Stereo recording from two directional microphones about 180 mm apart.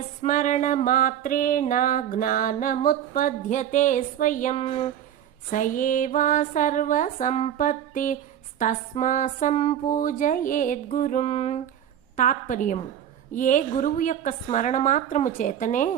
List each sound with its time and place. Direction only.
0.2 s speech: 45° left (ahead or behind)
4.5 s speech: 35° left (ahead or behind)
5.5 s speech: 50° left (ahead or behind)
9.9 s speech: 50° left (ahead or behind)
12.1 s speech: 45° left (ahead or behind)